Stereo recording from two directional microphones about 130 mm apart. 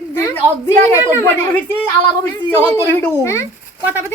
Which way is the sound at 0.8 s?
20° left (ahead or behind).